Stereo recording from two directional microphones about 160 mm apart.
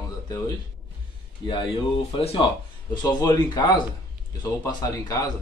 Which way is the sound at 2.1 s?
40° left (ahead or behind).